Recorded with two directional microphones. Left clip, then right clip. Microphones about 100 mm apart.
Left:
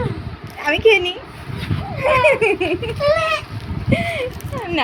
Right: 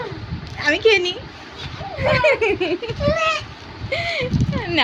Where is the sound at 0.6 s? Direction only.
35° right (ahead or behind).